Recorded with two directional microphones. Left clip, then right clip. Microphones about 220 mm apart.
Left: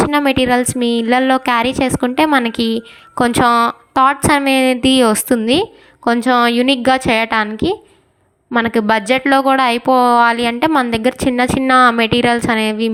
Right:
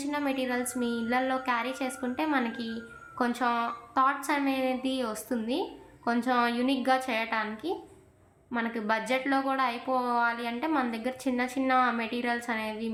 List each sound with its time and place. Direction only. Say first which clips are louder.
0.0 s a woman's voice: left 17 dB; 40° left (ahead or behind)